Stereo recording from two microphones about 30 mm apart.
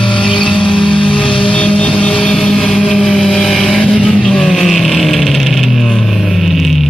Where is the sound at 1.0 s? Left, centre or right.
Left.